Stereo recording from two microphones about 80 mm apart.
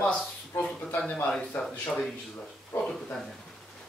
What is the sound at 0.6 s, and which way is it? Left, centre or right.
Speech, centre.